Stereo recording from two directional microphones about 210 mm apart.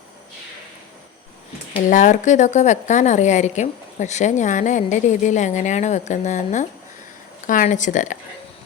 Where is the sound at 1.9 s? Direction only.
35° left (ahead or behind).